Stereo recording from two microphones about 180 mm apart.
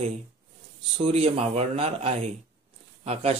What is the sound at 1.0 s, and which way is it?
Speech, 35° right (ahead or behind).